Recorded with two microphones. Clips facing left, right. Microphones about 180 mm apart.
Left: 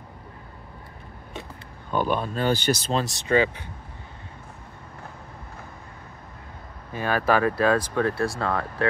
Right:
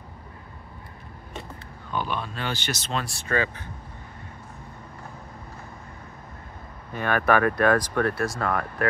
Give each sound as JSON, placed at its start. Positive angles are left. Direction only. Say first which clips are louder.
{"t": 1.9, "sound": "speech", "louder": "left 5 dB", "side_deg": 45}
{"t": 3.3, "sound": "speech", "louder": "left 5 dB", "side_deg": 20}
{"t": 7.0, "sound": "speech", "louder": "even", "side_deg": 30}